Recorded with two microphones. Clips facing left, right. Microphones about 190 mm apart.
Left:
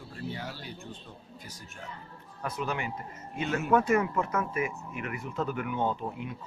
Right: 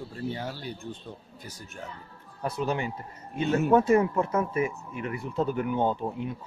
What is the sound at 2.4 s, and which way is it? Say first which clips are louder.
Speech: right 4 dB; 30° right (ahead or behind).